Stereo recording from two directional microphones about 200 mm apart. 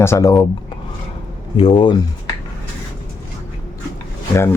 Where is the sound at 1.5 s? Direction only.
25° left (ahead or behind).